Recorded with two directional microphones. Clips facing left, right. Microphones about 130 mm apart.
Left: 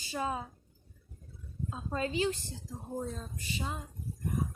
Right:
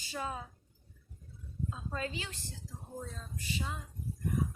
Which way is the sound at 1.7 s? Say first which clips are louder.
Left 8 dB; 25° left (ahead or behind).